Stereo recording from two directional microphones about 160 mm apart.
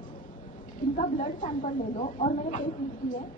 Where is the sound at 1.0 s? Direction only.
55° left (ahead or behind).